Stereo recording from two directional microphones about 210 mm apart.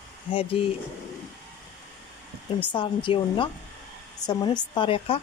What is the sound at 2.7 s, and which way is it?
A woman's voice, 25° left (ahead or behind).